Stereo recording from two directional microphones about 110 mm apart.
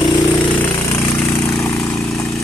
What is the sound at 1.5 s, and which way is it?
Vehicle, 5° left (ahead or behind).